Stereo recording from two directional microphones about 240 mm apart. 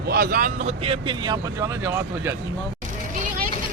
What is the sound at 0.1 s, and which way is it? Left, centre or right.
Speech, right.